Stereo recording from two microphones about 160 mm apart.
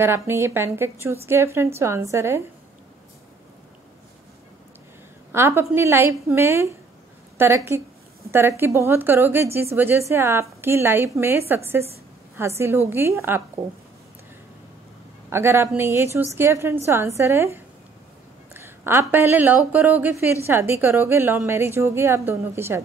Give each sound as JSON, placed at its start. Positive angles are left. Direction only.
{"t": 0.0, "sound": "a woman's voice", "side_deg": -15}
{"t": 5.3, "sound": "a woman's voice", "side_deg": -15}
{"t": 15.2, "sound": "a woman's voice", "side_deg": -15}